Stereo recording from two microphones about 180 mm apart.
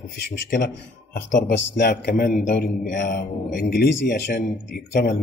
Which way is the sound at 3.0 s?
75° left (ahead or behind).